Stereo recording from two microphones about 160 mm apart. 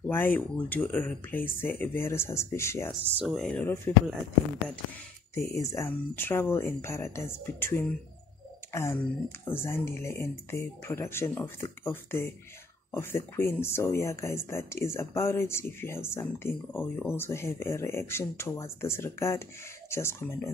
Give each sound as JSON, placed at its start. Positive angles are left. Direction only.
{"t": 0.0, "sound": "speech", "side_deg": 10}
{"t": 3.2, "sound": "speech", "side_deg": 0}
{"t": 5.6, "sound": "speech", "side_deg": 15}